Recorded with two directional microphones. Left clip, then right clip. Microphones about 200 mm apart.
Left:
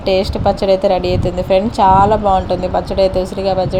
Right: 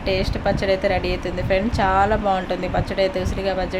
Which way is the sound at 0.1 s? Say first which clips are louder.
Left 8 dB; 20° left (ahead or behind).